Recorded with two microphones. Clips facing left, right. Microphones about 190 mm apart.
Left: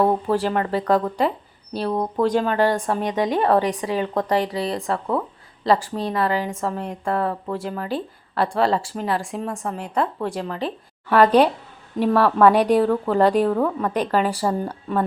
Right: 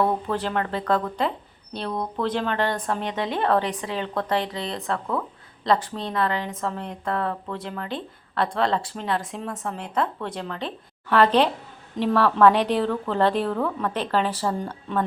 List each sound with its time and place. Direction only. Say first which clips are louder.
0.3 s a woman's voice: left 5 dB; 10° left (ahead or behind)
1.9 s speech: left 5 dB; 35° left (ahead or behind)
2.2 s a woman's voice: left 6 dB; 10° left (ahead or behind)